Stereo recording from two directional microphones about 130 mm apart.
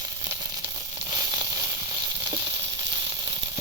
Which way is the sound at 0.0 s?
25° right (ahead or behind).